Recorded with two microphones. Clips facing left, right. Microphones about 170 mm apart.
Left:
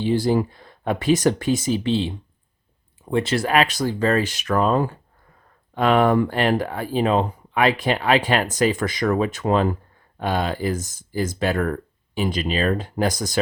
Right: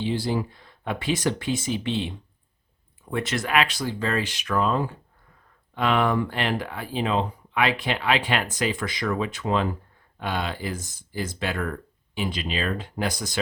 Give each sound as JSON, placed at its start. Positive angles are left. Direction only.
{"t": 0.0, "sound": "speech", "side_deg": 45}